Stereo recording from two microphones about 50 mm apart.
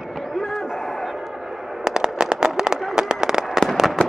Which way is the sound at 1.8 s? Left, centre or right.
Centre.